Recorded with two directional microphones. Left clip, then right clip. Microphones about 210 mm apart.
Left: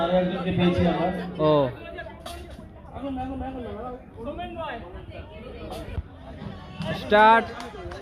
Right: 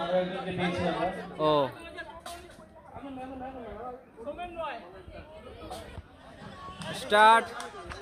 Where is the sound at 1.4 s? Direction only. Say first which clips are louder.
Left 5 dB; 5° right (ahead or behind).